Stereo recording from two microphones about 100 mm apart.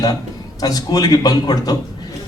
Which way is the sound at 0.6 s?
40° left (ahead or behind).